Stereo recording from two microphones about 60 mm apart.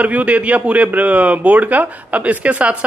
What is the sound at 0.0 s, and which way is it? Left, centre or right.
A man's voice, right.